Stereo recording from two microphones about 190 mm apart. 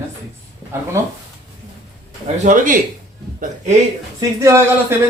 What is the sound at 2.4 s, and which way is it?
Speech, 45° right (ahead or behind).